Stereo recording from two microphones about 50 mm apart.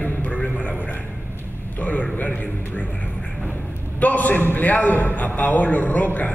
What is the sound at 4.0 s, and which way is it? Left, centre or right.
A man's voice, left.